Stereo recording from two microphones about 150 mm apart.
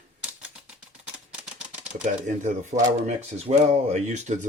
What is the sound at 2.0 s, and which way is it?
Speech, 55° right (ahead or behind).